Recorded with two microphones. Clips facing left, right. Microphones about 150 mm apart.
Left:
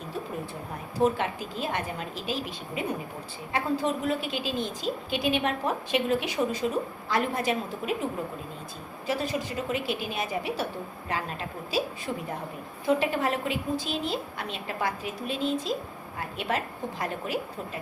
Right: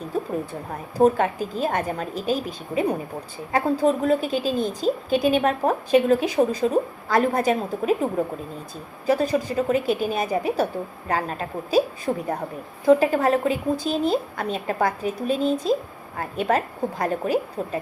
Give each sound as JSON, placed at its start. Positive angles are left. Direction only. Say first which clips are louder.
{"t": 0.9, "sound": "a woman's voice", "louder": "right 7 dB", "side_deg": -40}